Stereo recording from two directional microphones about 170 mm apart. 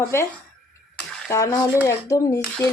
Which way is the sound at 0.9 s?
15° left (ahead or behind).